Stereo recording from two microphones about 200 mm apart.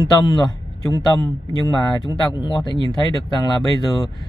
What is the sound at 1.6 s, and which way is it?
Speech, 20° left (ahead or behind).